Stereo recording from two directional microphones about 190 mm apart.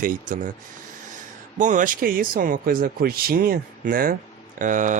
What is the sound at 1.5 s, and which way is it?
Speech, 40° right (ahead or behind).